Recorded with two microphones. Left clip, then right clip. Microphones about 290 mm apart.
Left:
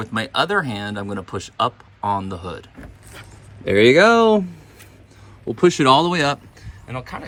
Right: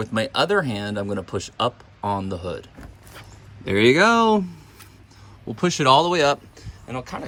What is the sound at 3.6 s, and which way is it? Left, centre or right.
Speech, centre.